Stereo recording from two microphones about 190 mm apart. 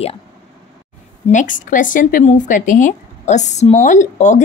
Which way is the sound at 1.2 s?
40° left (ahead or behind).